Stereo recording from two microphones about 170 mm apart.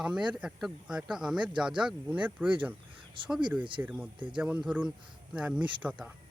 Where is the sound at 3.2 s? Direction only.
30° right (ahead or behind).